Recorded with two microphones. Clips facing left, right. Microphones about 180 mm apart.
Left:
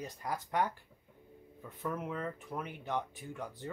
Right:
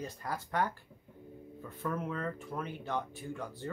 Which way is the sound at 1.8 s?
10° left (ahead or behind).